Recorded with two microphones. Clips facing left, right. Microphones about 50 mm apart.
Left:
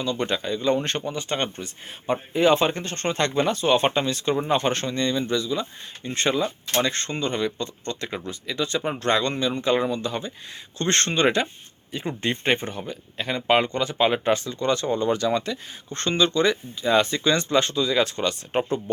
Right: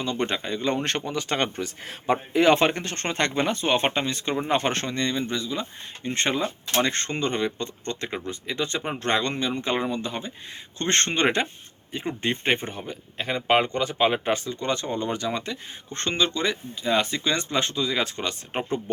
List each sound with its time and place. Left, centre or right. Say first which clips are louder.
0.0 s speech: left 1 dB; right
4.0 s speech: left 3 dB; right
12.0 s speech: left 1 dB; centre